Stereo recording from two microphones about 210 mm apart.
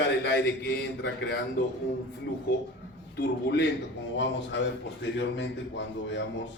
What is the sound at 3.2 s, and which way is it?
A man's voice, 55° left (ahead or behind).